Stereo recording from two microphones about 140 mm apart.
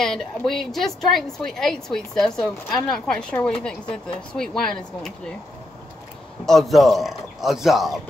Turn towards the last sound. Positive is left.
turn(degrees=0)  # may be behind; listen again after turning